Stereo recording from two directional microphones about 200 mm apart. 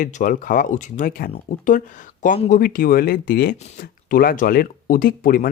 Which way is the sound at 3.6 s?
35° left (ahead or behind).